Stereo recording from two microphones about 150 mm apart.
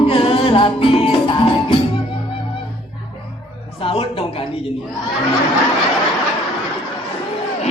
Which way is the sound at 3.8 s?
40° left (ahead or behind).